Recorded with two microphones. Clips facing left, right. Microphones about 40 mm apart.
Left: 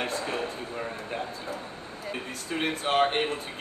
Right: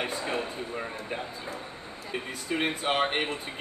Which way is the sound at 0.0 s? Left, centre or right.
Centre.